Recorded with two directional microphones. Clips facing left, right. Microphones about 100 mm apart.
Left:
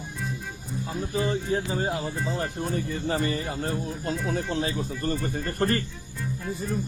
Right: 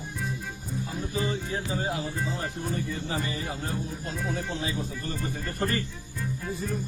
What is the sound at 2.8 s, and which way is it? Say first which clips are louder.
Speech: left 4 dB; 55° left (ahead or behind).